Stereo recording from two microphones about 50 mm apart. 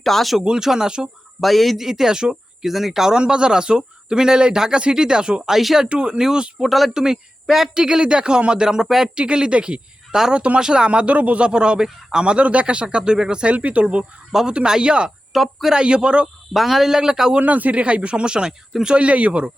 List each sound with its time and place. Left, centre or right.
0.0 s speech: centre
0.3 s speech: centre
1.4 s speech: centre
5.5 s speech: centre
5.8 s speech: centre
6.7 s speech: centre
6.9 s speech: centre
7.7 s speech: centre
9.1 s speech: centre
10.2 s a man's voice: centre
15.3 s speech: centre
15.7 s a man's voice: centre
16.5 s speech: centre
17.4 s a man's voice: right